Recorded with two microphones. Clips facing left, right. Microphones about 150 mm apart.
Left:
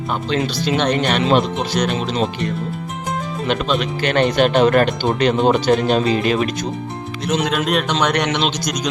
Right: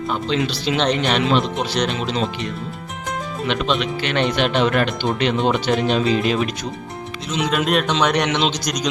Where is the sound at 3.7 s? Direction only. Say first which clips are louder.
Left 3 dB; 45° left (ahead or behind).